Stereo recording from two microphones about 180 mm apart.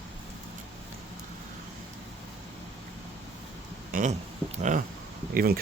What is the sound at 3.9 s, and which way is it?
Speech, 45° right (ahead or behind).